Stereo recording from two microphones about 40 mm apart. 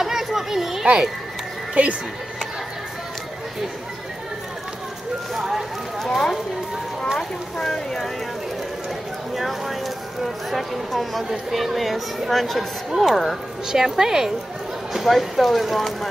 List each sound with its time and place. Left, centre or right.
0.0 s children playing: centre
1.7 s speech: right
5.3 s clip-clop: centre
5.9 s speech: centre
9.3 s speech: centre
13.7 s speech: centre